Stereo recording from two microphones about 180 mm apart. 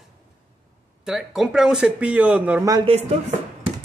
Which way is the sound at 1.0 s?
Centre (ahead or behind).